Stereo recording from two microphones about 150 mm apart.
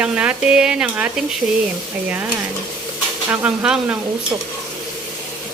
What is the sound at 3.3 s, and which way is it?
Speech, 10° right (ahead or behind).